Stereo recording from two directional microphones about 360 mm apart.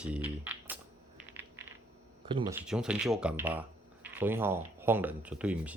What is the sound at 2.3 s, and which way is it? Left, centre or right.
Speech, centre.